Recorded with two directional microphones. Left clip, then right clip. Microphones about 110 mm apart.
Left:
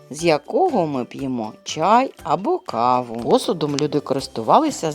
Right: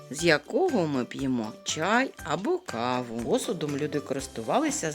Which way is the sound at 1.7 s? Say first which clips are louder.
Left 9 dB; 40° left (ahead or behind).